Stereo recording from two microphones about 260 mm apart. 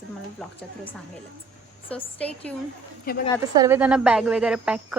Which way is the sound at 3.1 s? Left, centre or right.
Left.